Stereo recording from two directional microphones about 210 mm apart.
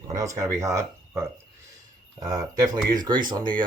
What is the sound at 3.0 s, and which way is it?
Speech, 20° right (ahead or behind).